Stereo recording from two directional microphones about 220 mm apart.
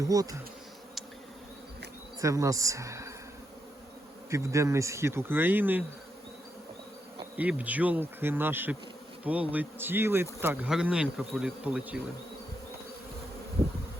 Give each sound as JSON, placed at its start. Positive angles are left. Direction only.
{"t": 0.0, "sound": "speech", "side_deg": -15}
{"t": 2.2, "sound": "speech", "side_deg": -15}
{"t": 4.3, "sound": "speech", "side_deg": -15}
{"t": 7.3, "sound": "speech", "side_deg": -5}